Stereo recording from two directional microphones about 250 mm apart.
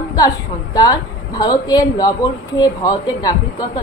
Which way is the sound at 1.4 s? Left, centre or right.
Centre.